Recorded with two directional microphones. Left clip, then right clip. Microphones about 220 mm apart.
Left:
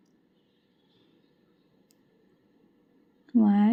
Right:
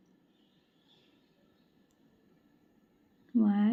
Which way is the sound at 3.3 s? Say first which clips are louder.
Left 6 dB; 20° left (ahead or behind).